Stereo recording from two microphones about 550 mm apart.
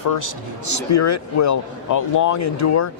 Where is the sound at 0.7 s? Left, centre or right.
Left.